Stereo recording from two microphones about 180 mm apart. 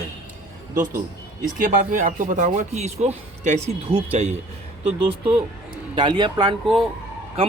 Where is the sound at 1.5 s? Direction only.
50° right (ahead or behind).